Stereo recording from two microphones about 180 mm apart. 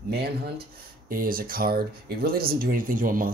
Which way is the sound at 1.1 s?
50° right (ahead or behind).